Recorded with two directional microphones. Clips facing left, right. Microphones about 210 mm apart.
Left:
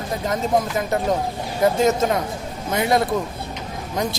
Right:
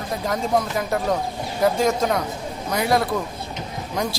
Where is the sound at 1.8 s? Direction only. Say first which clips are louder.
Left 2 dB; 25° left (ahead or behind).